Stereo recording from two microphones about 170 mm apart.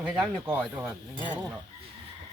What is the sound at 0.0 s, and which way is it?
Speech, 10° right (ahead or behind).